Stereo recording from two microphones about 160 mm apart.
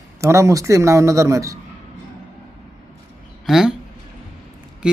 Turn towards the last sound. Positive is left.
turn(degrees=-5)  # may be behind; listen again after turning